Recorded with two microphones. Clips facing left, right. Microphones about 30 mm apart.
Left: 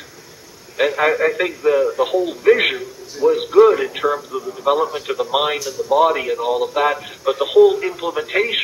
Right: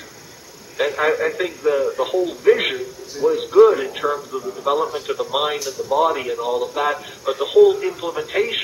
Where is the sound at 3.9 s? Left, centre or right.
Left.